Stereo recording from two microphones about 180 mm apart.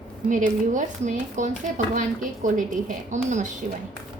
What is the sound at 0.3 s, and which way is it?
A woman's voice, 45° right (ahead or behind).